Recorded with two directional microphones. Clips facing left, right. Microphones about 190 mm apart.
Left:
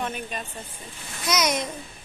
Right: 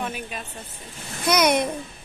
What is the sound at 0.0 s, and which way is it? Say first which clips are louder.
Speech: even; 5° right (ahead or behind).